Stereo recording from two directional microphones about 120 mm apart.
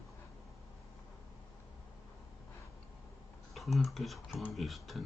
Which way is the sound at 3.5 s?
Centre (ahead or behind).